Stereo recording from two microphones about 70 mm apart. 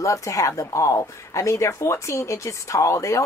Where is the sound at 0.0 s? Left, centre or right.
Left.